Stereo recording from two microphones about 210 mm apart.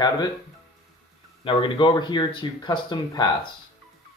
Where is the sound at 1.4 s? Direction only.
25° left (ahead or behind).